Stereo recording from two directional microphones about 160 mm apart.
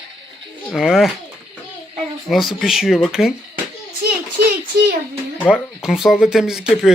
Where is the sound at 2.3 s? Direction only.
Centre (ahead or behind).